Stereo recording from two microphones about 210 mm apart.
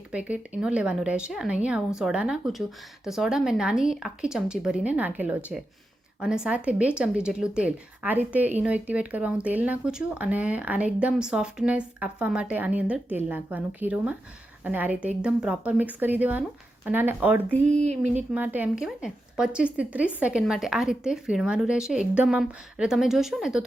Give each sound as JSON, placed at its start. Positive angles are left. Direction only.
{"t": 0.1, "sound": "a woman's voice", "side_deg": -5}
{"t": 17.5, "sound": "a sound", "side_deg": -30}
{"t": 18.3, "sound": "a woman's voice", "side_deg": -5}